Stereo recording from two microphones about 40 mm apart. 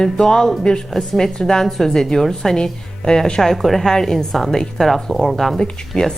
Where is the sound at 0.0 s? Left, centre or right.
Centre.